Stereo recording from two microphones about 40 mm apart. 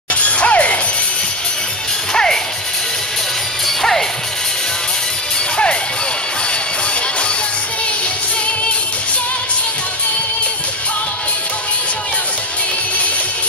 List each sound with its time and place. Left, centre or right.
0.1 s shatter: left
2.1 s music: centre
3.6 s music: centre